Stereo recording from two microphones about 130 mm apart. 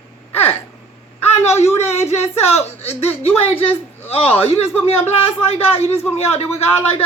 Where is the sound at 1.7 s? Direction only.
55° left (ahead or behind).